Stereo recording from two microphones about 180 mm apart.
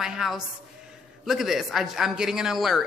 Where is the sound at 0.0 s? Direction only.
Centre (ahead or behind).